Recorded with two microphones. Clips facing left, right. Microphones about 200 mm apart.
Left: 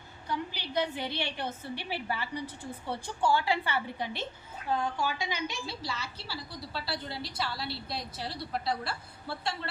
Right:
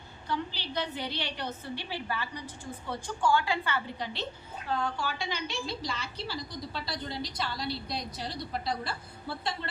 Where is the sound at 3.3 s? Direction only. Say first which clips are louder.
Right 1 dB; 20° left (ahead or behind).